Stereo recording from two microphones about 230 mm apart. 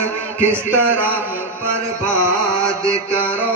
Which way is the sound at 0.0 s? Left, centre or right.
Centre.